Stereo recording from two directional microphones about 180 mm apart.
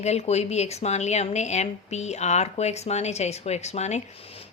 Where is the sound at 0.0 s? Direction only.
35° left (ahead or behind).